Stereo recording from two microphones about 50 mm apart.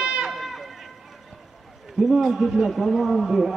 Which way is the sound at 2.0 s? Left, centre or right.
Centre.